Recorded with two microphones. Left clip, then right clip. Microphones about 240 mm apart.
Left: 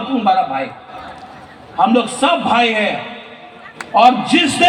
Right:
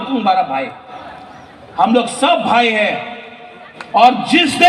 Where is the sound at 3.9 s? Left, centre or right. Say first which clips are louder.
Even; right.